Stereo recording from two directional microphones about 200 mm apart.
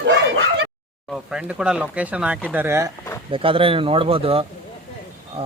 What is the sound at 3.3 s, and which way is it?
Speech, 25° right (ahead or behind).